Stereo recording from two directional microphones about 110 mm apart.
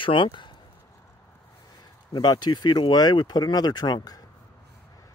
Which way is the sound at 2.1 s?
40° left (ahead or behind).